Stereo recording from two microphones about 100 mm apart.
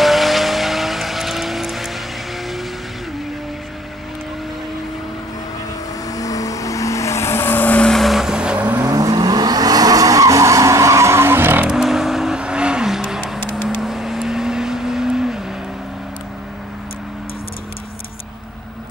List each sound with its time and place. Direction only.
0.0 s vehicle: centre (ahead or behind)
6.0 s vehicle: 35° left (ahead or behind); by 7.9 s 15° left (ahead or behind)
7.9 s vehicle: centre (ahead or behind)
8.8 s vehicle: 35° right (ahead or behind)
11.6 s vehicle: 5° right (ahead or behind)